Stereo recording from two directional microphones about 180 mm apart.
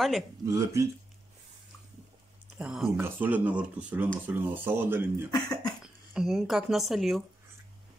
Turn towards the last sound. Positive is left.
turn(degrees=0)  # may be behind; listen again after turning